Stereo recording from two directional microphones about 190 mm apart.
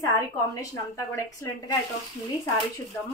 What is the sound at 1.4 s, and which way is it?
Speech, 15° left (ahead or behind).